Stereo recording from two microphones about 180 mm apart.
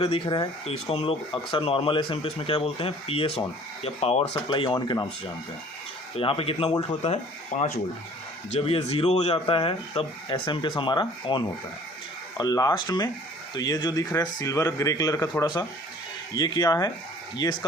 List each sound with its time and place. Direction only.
0.0 s speech: 30° left (ahead or behind)